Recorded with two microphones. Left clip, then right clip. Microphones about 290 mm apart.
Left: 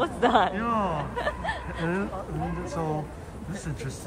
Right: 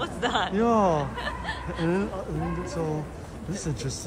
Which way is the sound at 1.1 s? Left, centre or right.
Left.